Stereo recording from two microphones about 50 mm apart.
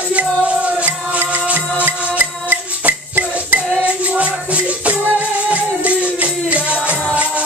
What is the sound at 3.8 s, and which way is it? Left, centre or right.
Music, right.